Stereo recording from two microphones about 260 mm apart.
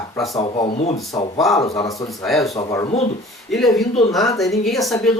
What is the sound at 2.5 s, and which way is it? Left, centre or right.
Speech, centre.